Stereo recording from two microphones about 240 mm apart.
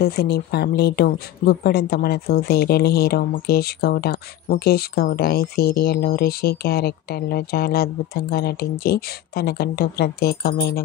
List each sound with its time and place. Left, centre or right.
0.0 s speech: left